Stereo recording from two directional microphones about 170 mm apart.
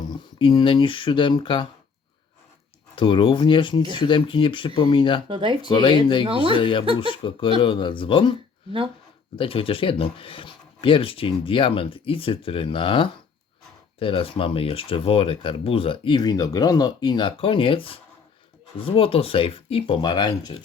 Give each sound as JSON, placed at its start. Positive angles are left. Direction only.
{"t": 0.3, "sound": "speech", "side_deg": 30}
{"t": 2.9, "sound": "speech", "side_deg": 30}
{"t": 5.3, "sound": "speech", "side_deg": -30}
{"t": 5.6, "sound": "speech", "side_deg": 25}
{"t": 6.2, "sound": "speech", "side_deg": -30}
{"t": 6.6, "sound": "speech", "side_deg": 30}
{"t": 6.8, "sound": "speech", "side_deg": -30}
{"t": 7.1, "sound": "speech", "side_deg": 30}
{"t": 9.4, "sound": "speech", "side_deg": 30}